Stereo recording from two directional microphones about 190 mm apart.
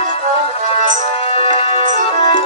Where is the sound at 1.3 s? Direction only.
30° left (ahead or behind).